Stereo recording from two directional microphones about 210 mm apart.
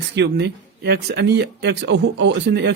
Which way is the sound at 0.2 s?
55° right (ahead or behind).